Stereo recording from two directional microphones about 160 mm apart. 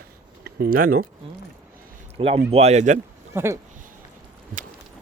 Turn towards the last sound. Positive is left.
turn(degrees=-15)  # may be behind; listen again after turning